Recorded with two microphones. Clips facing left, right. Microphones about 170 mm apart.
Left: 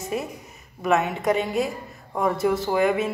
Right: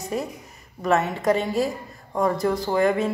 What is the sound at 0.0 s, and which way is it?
Speech, centre (ahead or behind).